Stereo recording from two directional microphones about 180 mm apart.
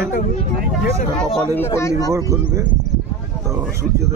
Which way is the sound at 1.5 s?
15° left (ahead or behind).